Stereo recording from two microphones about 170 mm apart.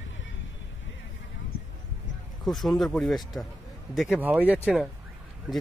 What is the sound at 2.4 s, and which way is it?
Speech, centre (ahead or behind).